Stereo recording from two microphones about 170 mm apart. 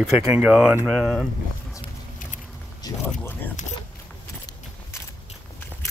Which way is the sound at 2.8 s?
20° left (ahead or behind).